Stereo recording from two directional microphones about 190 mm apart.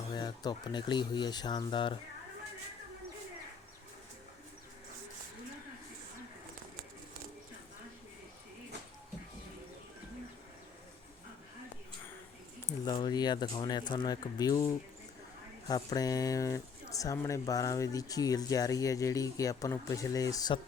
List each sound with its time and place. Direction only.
0.1 s speech: 20° left (ahead or behind)
12.8 s speech: 20° left (ahead or behind)